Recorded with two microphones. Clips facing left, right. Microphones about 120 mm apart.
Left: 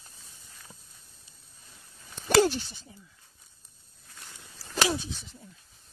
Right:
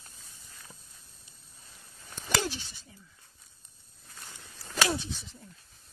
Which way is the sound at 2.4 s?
50° left (ahead or behind).